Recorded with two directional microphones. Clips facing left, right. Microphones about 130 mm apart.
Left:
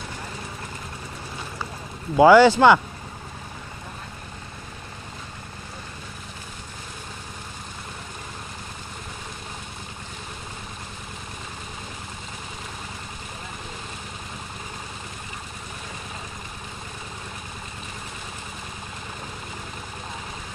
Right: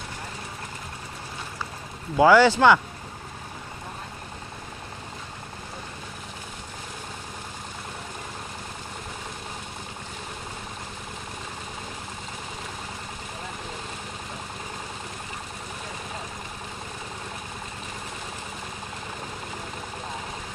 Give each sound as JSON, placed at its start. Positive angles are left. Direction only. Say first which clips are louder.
{"t": 2.1, "sound": "speech", "louder": "left 4 dB", "side_deg": 20}